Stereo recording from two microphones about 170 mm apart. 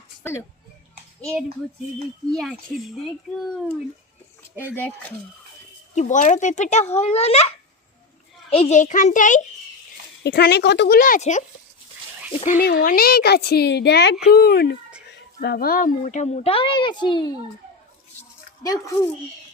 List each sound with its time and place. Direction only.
0.2 s speech: 15° left (ahead or behind)
1.2 s a child's voice: centre (ahead or behind)
4.7 s speech: 10° left (ahead or behind)
5.9 s a child's voice: 45° left (ahead or behind)
10.2 s a woman's voice: 70° left (ahead or behind); by 12.6 s 45° left (ahead or behind)
12.6 s a woman's voice: 60° left (ahead or behind); by 14.2 s 85° left
14.3 s a woman's voice: 65° left (ahead or behind); by 17.3 s 25° left (ahead or behind)
18.6 s speech: 20° left (ahead or behind)